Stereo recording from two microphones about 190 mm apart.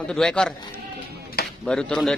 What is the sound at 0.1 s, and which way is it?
Speech, 5° left (ahead or behind).